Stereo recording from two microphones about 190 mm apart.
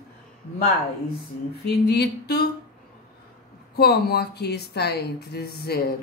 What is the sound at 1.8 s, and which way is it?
Speech, 60° left (ahead or behind).